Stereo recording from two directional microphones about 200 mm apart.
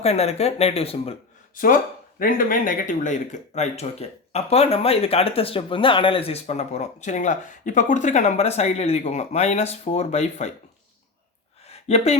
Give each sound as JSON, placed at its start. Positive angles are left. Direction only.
{"t": 0.0, "sound": "speech", "side_deg": 30}
{"t": 1.5, "sound": "speech", "side_deg": 45}
{"t": 11.7, "sound": "a sound", "side_deg": 30}